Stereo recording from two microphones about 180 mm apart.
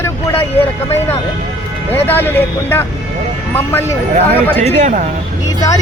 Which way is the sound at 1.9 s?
10° left (ahead or behind).